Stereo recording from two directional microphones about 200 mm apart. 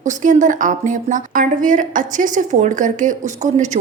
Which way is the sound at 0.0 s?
40° right (ahead or behind).